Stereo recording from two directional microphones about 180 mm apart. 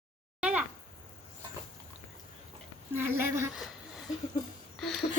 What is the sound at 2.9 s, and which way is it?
Speech, 10° right (ahead or behind).